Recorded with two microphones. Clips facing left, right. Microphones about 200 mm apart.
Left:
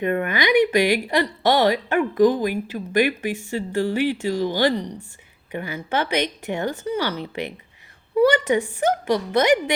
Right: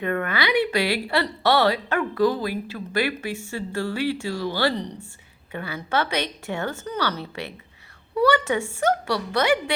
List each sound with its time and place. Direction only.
0.0 s speech: 20° left (ahead or behind)